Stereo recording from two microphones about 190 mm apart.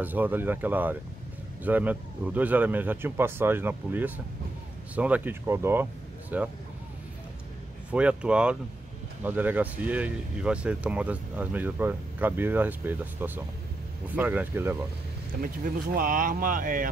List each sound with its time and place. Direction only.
0.0 s speech: 10° right (ahead or behind)
7.9 s speech: 5° right (ahead or behind)
15.4 s speech: 50° right (ahead or behind)